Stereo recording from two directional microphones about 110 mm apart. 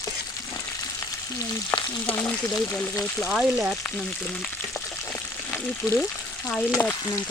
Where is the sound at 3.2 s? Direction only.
10° right (ahead or behind).